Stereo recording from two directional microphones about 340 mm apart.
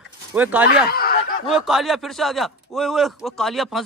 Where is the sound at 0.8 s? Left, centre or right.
Left.